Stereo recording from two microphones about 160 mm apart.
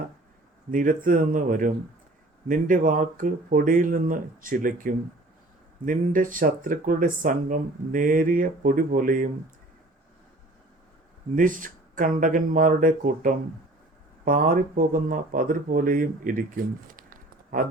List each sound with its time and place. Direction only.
0.7 s speech: 55° right (ahead or behind)
11.3 s speech: 55° right (ahead or behind)